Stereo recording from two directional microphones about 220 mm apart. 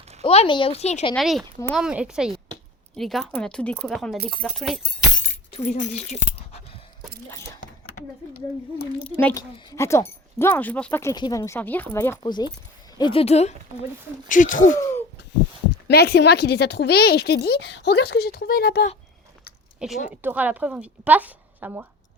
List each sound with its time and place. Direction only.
0.3 s speech: 25° left (ahead or behind)
1.1 s speech: centre (ahead or behind)
5.5 s speech: 30° left (ahead or behind)
7.3 s a sound: 15° left (ahead or behind)
9.1 s speech: 15° left (ahead or behind); by 14.8 s 35° left (ahead or behind)
15.9 s a woman's voice: 45° left (ahead or behind)
19.8 s a woman's voice: 5° right (ahead or behind)